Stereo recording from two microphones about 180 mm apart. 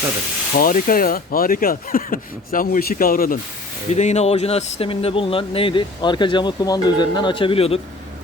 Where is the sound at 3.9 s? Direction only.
40° left (ahead or behind).